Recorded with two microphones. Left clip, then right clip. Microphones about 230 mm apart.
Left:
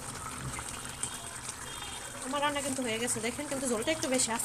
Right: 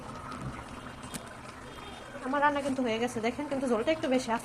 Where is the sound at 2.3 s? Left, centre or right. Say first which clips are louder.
Right 4 dB; left.